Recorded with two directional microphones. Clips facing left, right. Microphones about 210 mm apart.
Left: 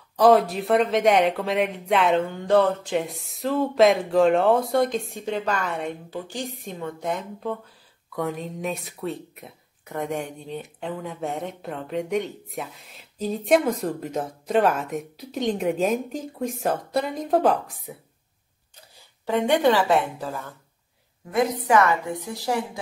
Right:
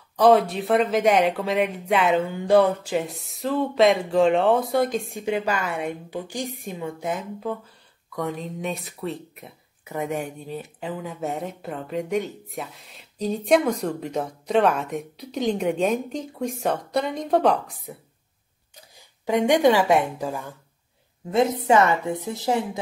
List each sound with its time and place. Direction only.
0.2 s speech: centre (ahead or behind)
18.8 s speech: 15° right (ahead or behind)
21.3 s a woman's voice: 25° right (ahead or behind)